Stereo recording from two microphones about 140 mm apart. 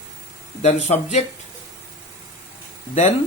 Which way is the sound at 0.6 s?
55° left (ahead or behind).